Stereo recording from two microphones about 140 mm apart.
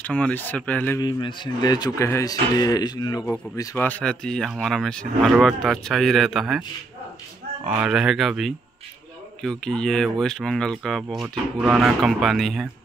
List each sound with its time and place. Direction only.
0.0 s speech: 10° left (ahead or behind)
0.9 s a man's voice: 30° left (ahead or behind)
3.7 s speech: 10° left (ahead or behind)
7.6 s speech: 10° right (ahead or behind)